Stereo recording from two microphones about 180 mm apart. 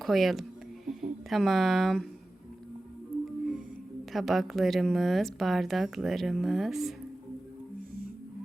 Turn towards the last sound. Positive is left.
turn(degrees=0)  # may be behind; listen again after turning